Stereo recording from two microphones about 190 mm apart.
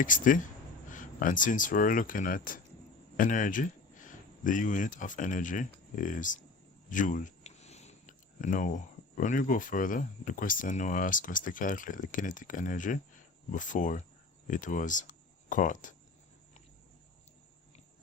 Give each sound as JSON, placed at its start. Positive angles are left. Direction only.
{"t": 0.0, "sound": "speech", "side_deg": 45}